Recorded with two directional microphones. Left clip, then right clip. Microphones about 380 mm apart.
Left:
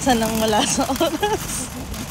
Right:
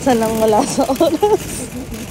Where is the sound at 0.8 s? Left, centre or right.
Right.